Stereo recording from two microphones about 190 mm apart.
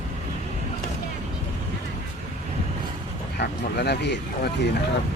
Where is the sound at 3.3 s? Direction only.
60° left (ahead or behind).